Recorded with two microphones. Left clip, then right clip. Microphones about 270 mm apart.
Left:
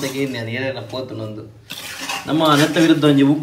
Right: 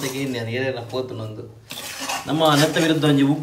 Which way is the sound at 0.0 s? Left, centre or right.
Centre.